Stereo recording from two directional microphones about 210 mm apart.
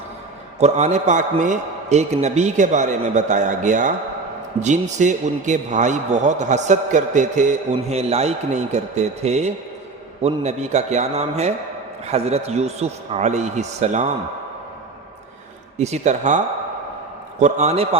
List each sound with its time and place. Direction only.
0.6 s a man's voice: 35° right (ahead or behind)
15.8 s a man's voice: 35° right (ahead or behind)
17.4 s a man's voice: 30° right (ahead or behind)